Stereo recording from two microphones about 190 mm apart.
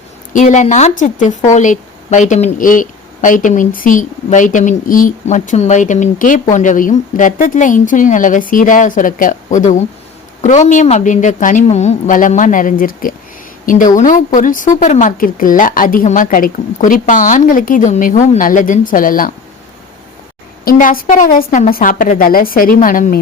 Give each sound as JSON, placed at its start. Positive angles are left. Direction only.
{"t": 0.3, "sound": "speech", "side_deg": 40}
{"t": 20.7, "sound": "speech", "side_deg": 45}